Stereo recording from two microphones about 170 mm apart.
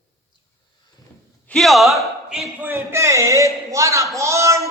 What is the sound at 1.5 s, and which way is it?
Speech, centre (ahead or behind).